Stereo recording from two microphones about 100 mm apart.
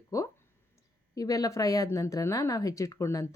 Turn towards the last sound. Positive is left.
turn(degrees=30)  # may be behind; listen again after turning